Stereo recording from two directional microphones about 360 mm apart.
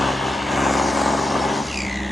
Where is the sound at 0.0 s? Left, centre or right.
Centre.